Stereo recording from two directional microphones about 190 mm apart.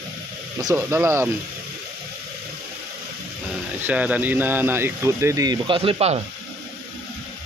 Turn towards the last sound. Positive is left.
turn(degrees=-30)  # may be behind; listen again after turning